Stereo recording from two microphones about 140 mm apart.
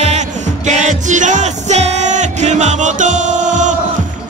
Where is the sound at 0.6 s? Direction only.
60° right (ahead or behind).